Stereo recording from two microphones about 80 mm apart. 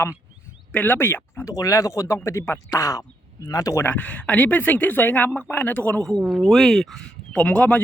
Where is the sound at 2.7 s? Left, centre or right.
Left.